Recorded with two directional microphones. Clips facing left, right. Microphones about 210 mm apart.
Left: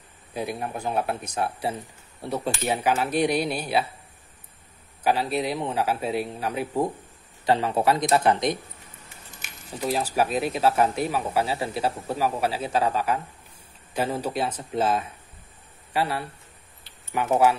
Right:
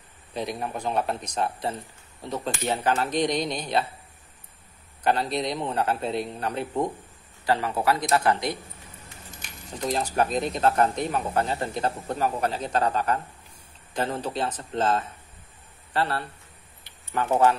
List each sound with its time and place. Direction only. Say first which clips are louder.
0.3 s speech: even; 5° left (ahead or behind)
5.0 s speech: left 1 dB; 5° left (ahead or behind)
7.4 s speech: left 2 dB; 20° left (ahead or behind)
9.4 s speech: left 1 dB; 5° left (ahead or behind)